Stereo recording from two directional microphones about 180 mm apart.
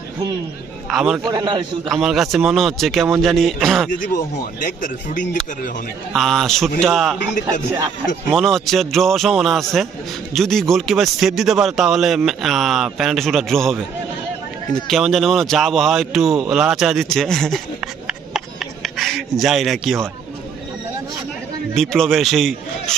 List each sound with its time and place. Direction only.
0.9 s speech: 5° right (ahead or behind)
1.3 s a man's voice: 25° right (ahead or behind)
1.9 s speech: centre (ahead or behind)
3.9 s speech: 45° left (ahead or behind)
6.1 s speech: centre (ahead or behind)
8.3 s speech: centre (ahead or behind)
18.3 s a sound: centre (ahead or behind)
21.8 s speech: centre (ahead or behind)